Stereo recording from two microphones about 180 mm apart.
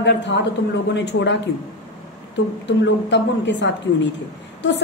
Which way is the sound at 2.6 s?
80° left.